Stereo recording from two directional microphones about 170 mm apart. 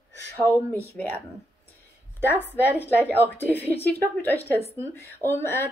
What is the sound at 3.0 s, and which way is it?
Speech, 10° right (ahead or behind).